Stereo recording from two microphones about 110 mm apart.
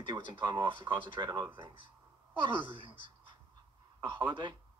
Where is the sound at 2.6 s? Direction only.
50° right (ahead or behind).